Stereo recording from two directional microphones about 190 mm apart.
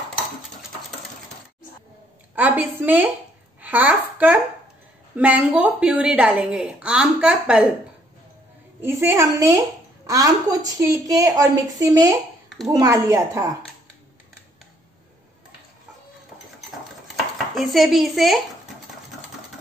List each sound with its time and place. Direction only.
2.3 s a woman's voice: 10° right (ahead or behind)
8.8 s a woman's voice: 15° right (ahead or behind)
17.6 s a woman's voice: centre (ahead or behind)